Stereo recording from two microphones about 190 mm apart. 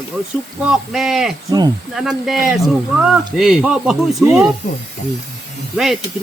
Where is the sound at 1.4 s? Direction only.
20° right (ahead or behind).